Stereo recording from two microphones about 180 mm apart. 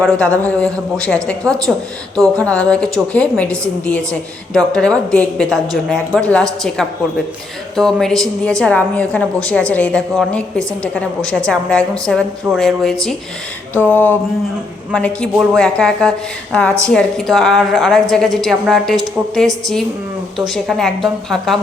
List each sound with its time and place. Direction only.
0.4 s a woman's voice: 5° left (ahead or behind)
2.3 s a woman's voice: 20° right (ahead or behind)
2.6 s a woman's voice: 5° left (ahead or behind)
7.8 s a woman's voice: centre (ahead or behind)
13.7 s a sound: 10° left (ahead or behind)
14.9 s a woman's voice: 5° left (ahead or behind)
20.5 s a woman's voice: centre (ahead or behind)